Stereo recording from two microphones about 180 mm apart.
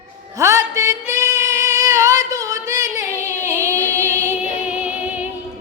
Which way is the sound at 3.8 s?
10° left (ahead or behind).